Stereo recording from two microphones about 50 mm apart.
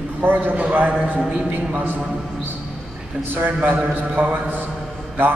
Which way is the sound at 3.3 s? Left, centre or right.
Right.